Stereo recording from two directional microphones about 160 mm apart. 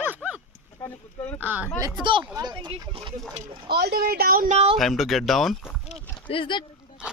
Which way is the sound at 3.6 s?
80° right.